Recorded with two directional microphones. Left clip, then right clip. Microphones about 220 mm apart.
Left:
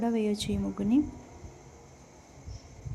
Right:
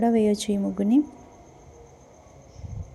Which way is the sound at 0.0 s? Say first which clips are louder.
Right 8 dB; 20° right (ahead or behind).